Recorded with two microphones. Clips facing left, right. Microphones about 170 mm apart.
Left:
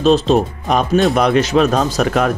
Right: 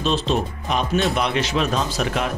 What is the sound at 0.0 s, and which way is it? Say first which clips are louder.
Speech: left 9 dB; 40° left (ahead or behind).